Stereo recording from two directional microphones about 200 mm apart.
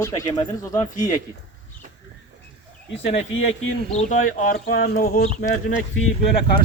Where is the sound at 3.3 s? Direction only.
80° left.